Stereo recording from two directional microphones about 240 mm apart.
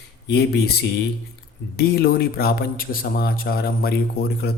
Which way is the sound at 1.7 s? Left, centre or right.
Left.